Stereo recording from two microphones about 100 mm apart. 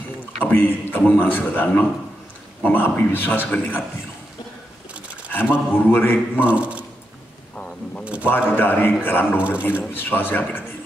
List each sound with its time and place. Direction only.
0.4 s a man's voice: 20° left (ahead or behind)
5.3 s a man's voice: 20° left (ahead or behind)
6.4 s speech: 15° right (ahead or behind)
8.0 s a man's voice: 15° right (ahead or behind)
8.5 s a man's voice: 20° left (ahead or behind)